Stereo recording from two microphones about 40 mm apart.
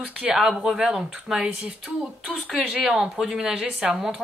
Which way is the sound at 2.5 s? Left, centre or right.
Centre.